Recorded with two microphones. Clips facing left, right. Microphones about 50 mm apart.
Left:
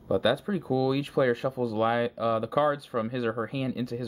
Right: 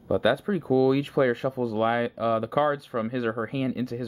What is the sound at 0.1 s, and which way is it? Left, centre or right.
Speech, centre.